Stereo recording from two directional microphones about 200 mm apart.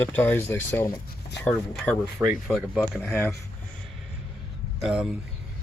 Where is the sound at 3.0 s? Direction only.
10° left (ahead or behind).